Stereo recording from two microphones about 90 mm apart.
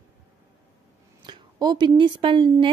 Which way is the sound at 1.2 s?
55° right (ahead or behind).